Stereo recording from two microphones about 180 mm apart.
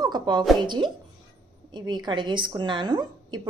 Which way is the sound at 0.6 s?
25° right (ahead or behind).